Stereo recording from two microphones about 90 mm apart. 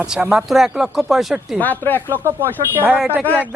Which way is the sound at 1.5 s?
20° left (ahead or behind).